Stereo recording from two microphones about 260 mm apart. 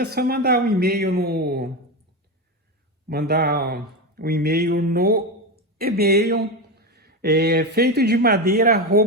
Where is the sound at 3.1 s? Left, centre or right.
Right.